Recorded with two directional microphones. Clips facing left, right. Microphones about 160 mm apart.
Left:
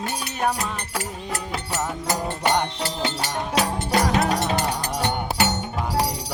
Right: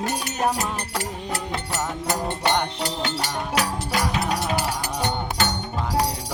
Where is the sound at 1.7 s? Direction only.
5° left (ahead or behind).